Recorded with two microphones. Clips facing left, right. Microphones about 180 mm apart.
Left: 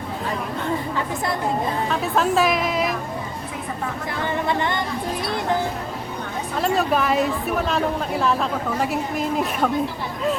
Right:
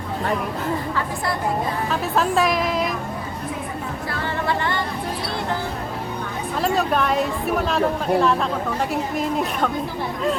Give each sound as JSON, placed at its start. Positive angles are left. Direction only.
{"t": 1.9, "sound": "a woman's voice", "side_deg": 0}
{"t": 4.2, "sound": "music", "side_deg": 20}
{"t": 6.6, "sound": "a woman's voice", "side_deg": 0}